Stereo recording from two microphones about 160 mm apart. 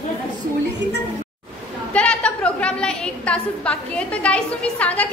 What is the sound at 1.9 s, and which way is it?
A woman's voice, 10° left (ahead or behind).